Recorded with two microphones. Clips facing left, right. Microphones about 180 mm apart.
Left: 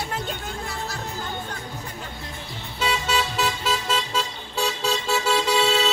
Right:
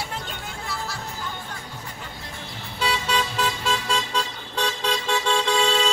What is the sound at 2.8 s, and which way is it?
Vehicle, 5° left (ahead or behind).